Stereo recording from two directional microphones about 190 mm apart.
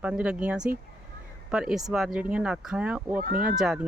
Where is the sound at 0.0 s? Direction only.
5° right (ahead or behind).